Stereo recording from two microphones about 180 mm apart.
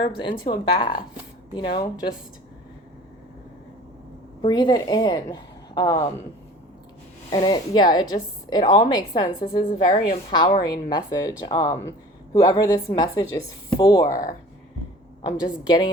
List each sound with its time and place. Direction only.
0.0 s speech: 30° left (ahead or behind)
4.4 s speech: 25° left (ahead or behind)
7.3 s speech: 25° left (ahead or behind)
15.2 s speech: 25° left (ahead or behind)